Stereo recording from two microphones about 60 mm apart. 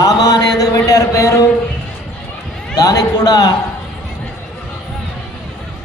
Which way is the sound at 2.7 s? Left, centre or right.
Left.